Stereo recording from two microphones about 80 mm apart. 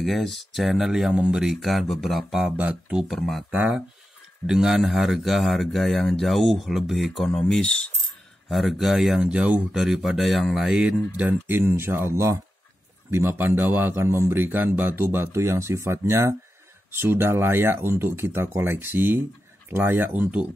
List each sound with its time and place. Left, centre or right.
0.0 s speech: centre
2.4 s speech: centre
3.2 s speech: centre
4.5 s speech: centre
11.1 s speech: right